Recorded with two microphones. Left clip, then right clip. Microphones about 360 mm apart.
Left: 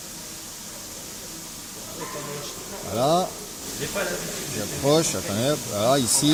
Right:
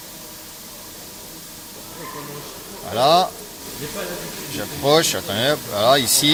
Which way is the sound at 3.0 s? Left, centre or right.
Right.